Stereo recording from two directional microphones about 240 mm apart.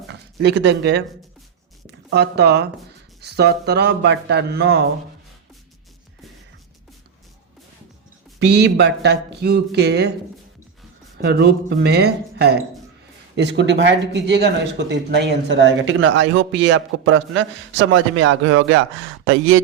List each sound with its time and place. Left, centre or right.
0.1 s speech: right
2.0 s a man's voice: right
8.4 s a man's voice: right
11.2 s a man's voice: right